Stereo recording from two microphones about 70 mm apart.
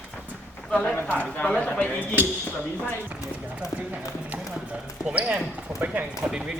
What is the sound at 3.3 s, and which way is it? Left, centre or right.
Clip-clop, centre.